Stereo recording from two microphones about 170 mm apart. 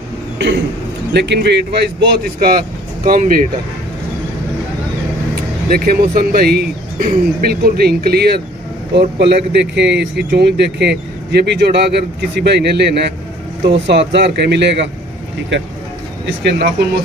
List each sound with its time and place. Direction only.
1.1 s speech: 85° right; by 3.4 s 55° right (ahead or behind)
5.3 s speech: 60° right (ahead or behind)
8.9 s speech: 80° right
13.7 s speech: 90° right
16.4 s speech: 70° right (ahead or behind)